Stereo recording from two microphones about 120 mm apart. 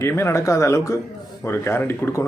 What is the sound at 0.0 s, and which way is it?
Speech, 20° left (ahead or behind).